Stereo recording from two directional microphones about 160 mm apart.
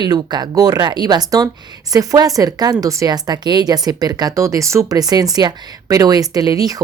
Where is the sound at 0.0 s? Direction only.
25° right (ahead or behind).